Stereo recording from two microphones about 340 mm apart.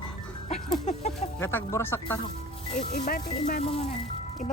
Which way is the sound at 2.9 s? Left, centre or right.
Left.